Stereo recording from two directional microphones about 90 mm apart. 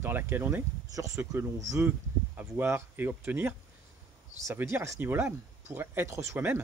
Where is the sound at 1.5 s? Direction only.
40° right (ahead or behind).